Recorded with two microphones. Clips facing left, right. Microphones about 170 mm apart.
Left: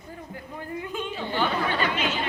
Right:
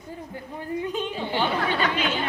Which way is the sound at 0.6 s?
25° right (ahead or behind).